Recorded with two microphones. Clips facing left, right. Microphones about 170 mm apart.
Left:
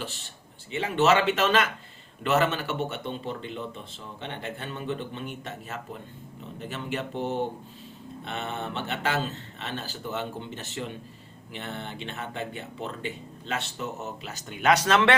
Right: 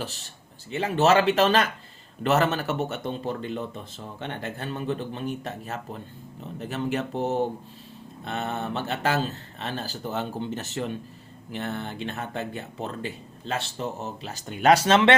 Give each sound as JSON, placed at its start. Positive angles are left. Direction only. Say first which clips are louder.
{"t": 0.7, "sound": "speech", "louder": "right 2 dB", "side_deg": -40}